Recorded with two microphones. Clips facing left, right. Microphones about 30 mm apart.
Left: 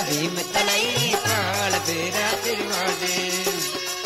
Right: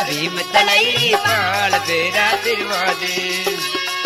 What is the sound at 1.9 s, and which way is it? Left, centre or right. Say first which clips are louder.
Music: right 8 dB; right.